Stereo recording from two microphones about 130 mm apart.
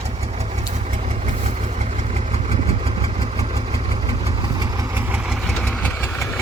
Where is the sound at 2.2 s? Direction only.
55° right (ahead or behind).